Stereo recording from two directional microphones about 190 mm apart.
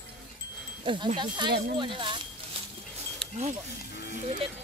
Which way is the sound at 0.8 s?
25° right (ahead or behind).